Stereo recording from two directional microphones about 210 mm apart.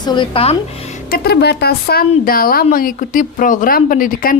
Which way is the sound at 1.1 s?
45° left (ahead or behind).